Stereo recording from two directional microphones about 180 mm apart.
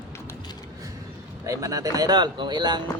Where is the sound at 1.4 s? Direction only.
20° right (ahead or behind).